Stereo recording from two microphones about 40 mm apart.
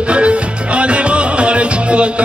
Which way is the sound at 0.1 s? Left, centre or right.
Right.